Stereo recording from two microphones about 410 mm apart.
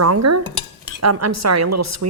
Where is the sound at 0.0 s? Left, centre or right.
Right.